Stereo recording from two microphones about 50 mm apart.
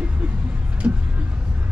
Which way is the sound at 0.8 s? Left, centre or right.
Right.